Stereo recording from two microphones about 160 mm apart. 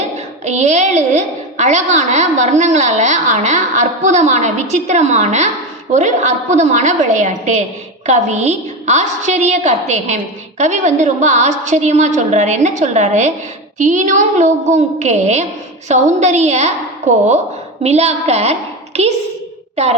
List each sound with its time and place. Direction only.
0.4 s a woman's voice: 45° right (ahead or behind)
17.8 s a woman's voice: 40° right (ahead or behind)